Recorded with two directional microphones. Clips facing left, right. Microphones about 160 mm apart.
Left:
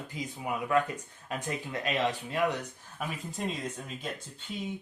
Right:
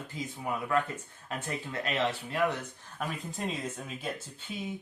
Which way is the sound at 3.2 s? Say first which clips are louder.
Left 1 dB; centre (ahead or behind).